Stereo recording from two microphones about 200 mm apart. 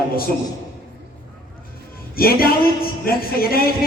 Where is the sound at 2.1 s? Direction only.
50° left (ahead or behind).